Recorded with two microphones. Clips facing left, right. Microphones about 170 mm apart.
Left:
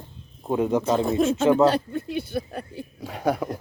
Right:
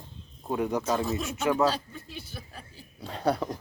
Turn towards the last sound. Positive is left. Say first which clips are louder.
# left 3 dB
turn(degrees=10)  # may be behind; listen again after turning